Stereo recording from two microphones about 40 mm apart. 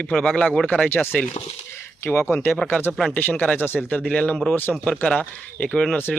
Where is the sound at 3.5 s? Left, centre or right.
Left.